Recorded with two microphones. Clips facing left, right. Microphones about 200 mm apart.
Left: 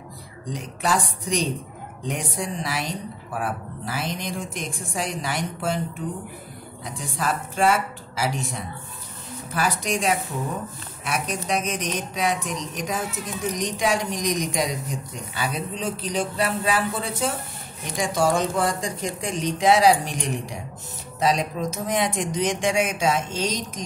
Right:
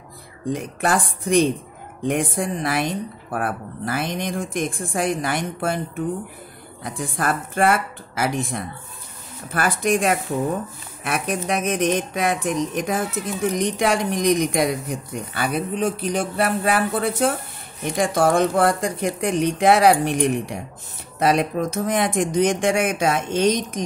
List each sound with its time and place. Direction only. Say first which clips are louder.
0.5 s speech: right 4 dB; 55° right (ahead or behind)